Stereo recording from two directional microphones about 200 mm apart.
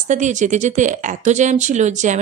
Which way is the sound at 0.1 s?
35° right (ahead or behind).